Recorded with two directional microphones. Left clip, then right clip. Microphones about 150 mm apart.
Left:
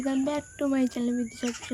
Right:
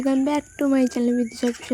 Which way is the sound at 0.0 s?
40° right (ahead or behind).